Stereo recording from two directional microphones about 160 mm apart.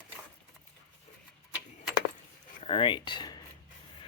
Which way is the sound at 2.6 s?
35° left (ahead or behind).